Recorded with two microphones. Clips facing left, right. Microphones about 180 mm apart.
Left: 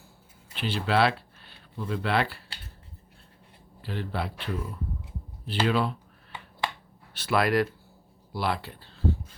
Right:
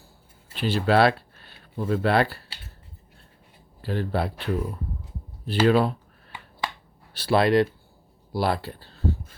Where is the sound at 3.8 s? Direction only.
45° right (ahead or behind).